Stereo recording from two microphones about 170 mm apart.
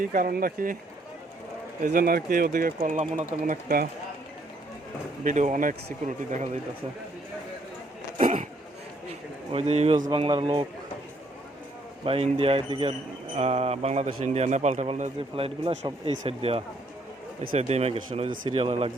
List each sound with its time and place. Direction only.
0.0 s speech: 50° right (ahead or behind)
1.8 s speech: 60° right (ahead or behind)
5.2 s speech: 45° right (ahead or behind)
8.2 s a sound: 45° right (ahead or behind)
9.5 s a man's voice: 35° right (ahead or behind)
12.0 s a man's voice: 35° right (ahead or behind)